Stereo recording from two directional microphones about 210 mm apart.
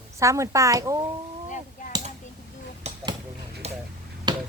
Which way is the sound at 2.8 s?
20° right (ahead or behind).